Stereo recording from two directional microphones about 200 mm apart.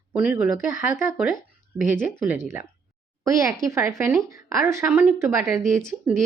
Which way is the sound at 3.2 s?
15° right (ahead or behind).